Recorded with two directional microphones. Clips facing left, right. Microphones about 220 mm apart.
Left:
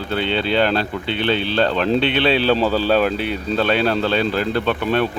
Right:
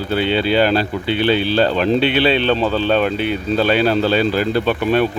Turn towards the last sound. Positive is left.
turn(degrees=-5)  # may be behind; listen again after turning